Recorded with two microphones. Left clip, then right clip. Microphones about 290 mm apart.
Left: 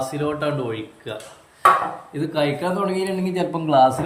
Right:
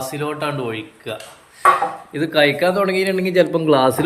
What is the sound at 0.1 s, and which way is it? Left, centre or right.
A man's voice, centre.